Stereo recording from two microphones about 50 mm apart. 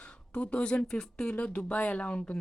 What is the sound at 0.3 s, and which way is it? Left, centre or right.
Speech, left.